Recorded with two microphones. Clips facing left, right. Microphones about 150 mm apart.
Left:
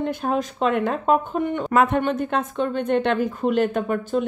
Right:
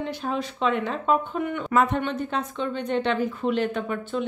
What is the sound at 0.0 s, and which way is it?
Speech, 50° left (ahead or behind).